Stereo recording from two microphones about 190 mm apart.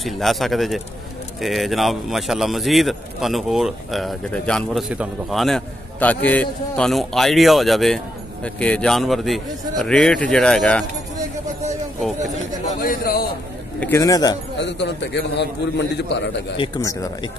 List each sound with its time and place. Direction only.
0.0 s speech: centre (ahead or behind)
12.8 s a man's voice: 50° left (ahead or behind)
13.7 s a man's voice: 15° left (ahead or behind)
14.6 s a man's voice: 65° left (ahead or behind)
16.5 s speech: 25° left (ahead or behind)